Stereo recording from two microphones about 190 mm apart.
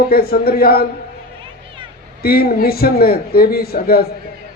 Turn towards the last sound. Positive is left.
turn(degrees=55)  # may be behind; listen again after turning